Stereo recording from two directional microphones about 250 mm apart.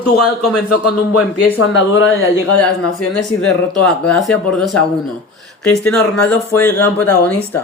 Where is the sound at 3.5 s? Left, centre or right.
Centre.